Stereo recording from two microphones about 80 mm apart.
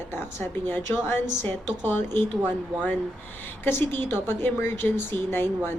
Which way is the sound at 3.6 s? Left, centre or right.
Left.